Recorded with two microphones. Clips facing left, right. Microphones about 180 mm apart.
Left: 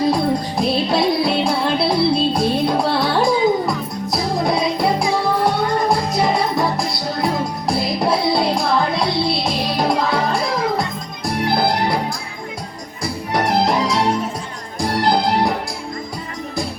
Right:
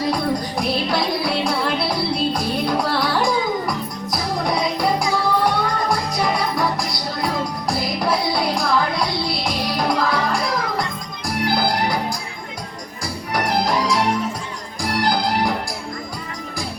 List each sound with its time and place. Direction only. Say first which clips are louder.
0.1 s music: left 3 dB; 25° left (ahead or behind)
13.3 s music: left 3 dB; 25° left (ahead or behind)